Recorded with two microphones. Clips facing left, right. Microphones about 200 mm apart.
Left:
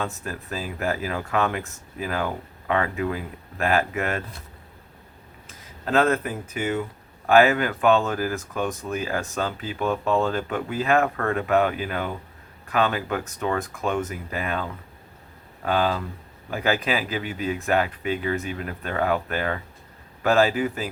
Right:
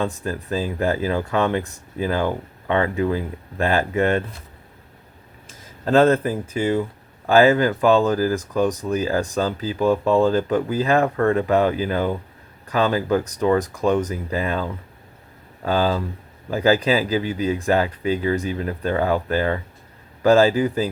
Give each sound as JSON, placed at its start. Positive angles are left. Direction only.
{"t": 0.0, "sound": "speech", "side_deg": -30}
{"t": 5.8, "sound": "speech", "side_deg": -30}